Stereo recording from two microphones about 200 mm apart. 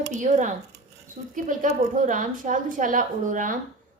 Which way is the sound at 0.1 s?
35° right (ahead or behind).